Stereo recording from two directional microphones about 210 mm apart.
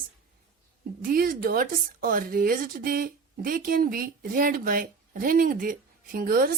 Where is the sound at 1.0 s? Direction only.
45° right (ahead or behind).